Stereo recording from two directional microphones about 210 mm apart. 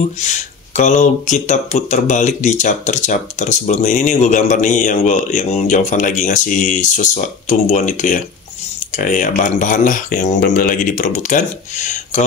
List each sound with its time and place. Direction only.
0.2 s speech: 35° left (ahead or behind)